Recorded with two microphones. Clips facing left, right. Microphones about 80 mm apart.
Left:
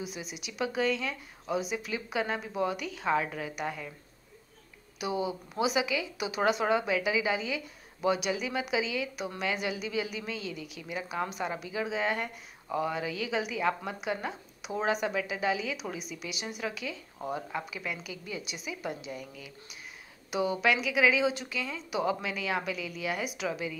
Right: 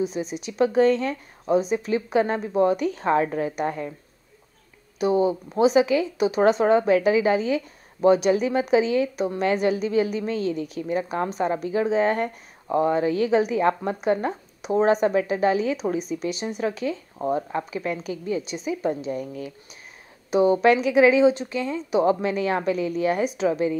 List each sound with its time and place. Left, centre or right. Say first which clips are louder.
0.0 s a woman's voice: right 13 dB; right
4.9 s a woman's voice: right 11 dB; right